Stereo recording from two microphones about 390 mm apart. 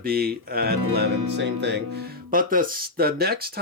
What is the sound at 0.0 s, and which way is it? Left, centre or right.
Speech, right.